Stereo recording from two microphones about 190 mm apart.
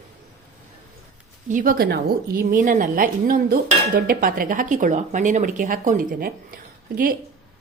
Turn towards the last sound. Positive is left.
turn(degrees=-50)  # may be behind; listen again after turning